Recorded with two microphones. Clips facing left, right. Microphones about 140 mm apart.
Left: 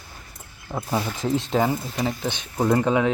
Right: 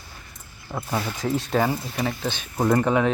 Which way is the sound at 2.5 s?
Centre (ahead or behind).